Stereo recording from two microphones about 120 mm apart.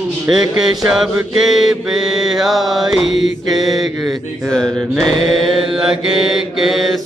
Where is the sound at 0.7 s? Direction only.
5° right (ahead or behind).